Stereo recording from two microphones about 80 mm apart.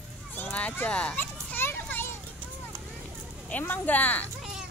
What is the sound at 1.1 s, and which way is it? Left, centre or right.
Children playing, left.